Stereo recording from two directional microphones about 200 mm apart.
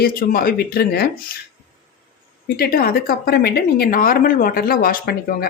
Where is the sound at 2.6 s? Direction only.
45° left (ahead or behind).